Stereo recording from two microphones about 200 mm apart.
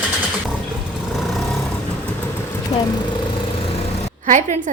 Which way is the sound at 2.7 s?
20° left (ahead or behind).